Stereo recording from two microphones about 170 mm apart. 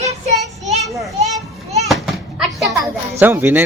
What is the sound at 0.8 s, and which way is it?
Children playing, centre (ahead or behind).